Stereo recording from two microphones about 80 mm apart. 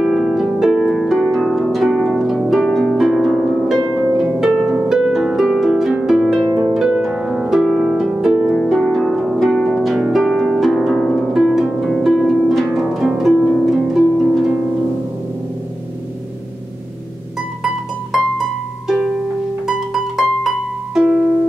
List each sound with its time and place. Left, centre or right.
0.0 s harp: centre
8.5 s harp: centre
18.9 s harp: centre